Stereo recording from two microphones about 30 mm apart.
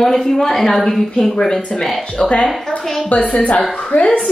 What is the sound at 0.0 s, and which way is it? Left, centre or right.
A woman's voice, centre.